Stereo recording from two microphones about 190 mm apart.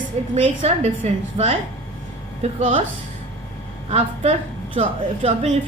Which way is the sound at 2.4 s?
30° right (ahead or behind).